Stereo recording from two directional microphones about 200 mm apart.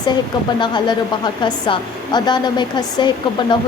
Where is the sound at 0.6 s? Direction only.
20° left (ahead or behind).